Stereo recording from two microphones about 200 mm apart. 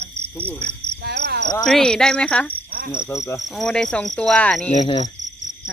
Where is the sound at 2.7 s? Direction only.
45° right (ahead or behind).